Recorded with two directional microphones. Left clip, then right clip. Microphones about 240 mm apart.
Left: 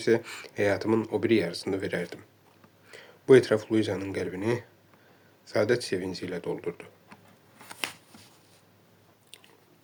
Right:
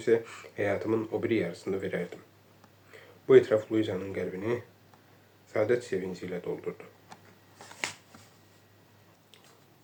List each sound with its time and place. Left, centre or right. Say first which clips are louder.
0.0 s speech: left 1 dB; left